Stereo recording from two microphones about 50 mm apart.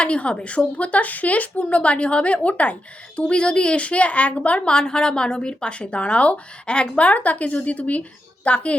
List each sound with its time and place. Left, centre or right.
0.0 s a woman's voice: left
4.7 s a woman's voice: centre